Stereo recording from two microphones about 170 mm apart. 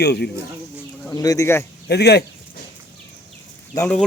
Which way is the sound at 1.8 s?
75° left (ahead or behind).